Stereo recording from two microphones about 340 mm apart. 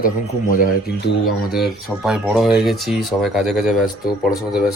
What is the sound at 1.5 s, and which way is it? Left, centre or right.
Speech, centre.